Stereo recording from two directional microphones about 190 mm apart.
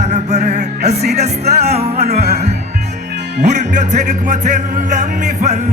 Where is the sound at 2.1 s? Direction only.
55° right (ahead or behind).